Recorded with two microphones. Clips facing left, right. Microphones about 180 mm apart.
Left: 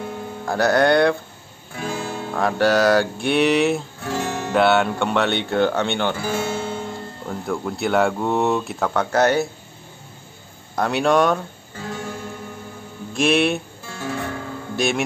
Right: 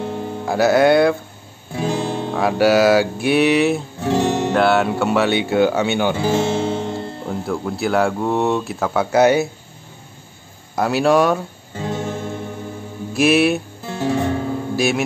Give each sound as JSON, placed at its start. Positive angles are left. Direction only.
{"t": 0.5, "sound": "speech", "side_deg": -5}
{"t": 1.8, "sound": "music", "side_deg": -20}
{"t": 2.3, "sound": "speech", "side_deg": -5}
{"t": 4.0, "sound": "music", "side_deg": -20}
{"t": 4.6, "sound": "speech", "side_deg": 0}
{"t": 6.1, "sound": "music", "side_deg": -20}
{"t": 7.2, "sound": "speech", "side_deg": 0}
{"t": 10.8, "sound": "speech", "side_deg": -5}
{"t": 11.8, "sound": "guitar", "side_deg": -20}
{"t": 13.1, "sound": "music", "side_deg": -5}
{"t": 13.8, "sound": "music", "side_deg": -20}